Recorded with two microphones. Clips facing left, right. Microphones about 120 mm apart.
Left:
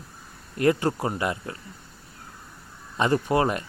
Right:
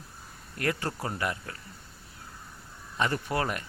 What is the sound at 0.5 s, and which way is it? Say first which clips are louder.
Speech: left 9 dB; 20° left (ahead or behind).